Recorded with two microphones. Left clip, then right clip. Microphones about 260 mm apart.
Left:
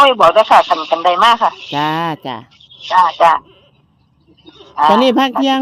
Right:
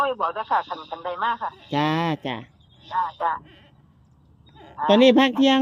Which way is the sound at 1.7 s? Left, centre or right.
Centre.